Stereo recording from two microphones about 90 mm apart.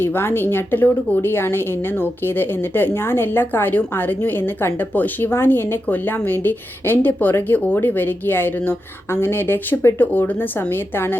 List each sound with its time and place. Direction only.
0.0 s a woman's voice: 25° left (ahead or behind)